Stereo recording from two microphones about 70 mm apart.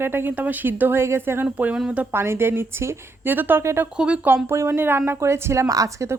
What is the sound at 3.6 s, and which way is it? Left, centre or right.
Speech, right.